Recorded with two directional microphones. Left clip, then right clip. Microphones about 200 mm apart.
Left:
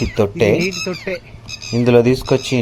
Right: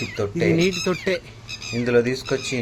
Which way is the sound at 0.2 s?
40° left (ahead or behind).